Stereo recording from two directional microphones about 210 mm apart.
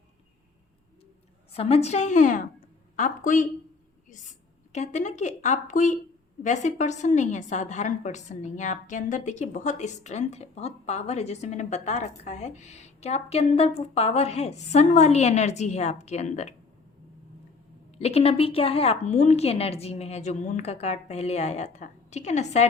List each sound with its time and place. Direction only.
1.5 s a woman's voice: 30° left (ahead or behind)
4.7 s a woman's voice: 35° left (ahead or behind)
17.9 s a woman's voice: 30° left (ahead or behind)